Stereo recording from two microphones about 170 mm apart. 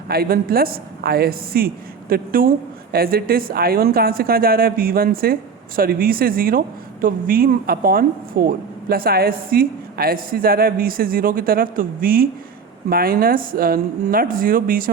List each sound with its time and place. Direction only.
0.1 s a woman's voice: 60° right (ahead or behind)